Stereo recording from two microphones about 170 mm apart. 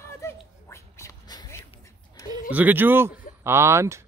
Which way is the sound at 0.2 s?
15° left (ahead or behind).